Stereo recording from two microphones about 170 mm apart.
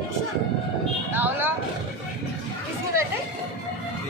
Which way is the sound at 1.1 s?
10° right (ahead or behind).